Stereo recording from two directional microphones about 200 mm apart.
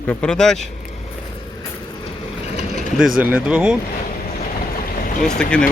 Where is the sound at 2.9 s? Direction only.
5° right (ahead or behind).